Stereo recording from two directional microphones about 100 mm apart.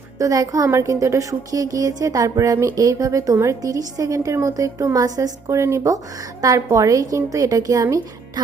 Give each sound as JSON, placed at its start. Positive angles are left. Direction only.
{"t": 0.2, "sound": "a woman's voice", "side_deg": -35}